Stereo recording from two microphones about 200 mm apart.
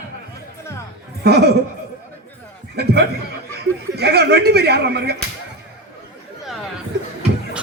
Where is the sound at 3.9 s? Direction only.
55° right (ahead or behind).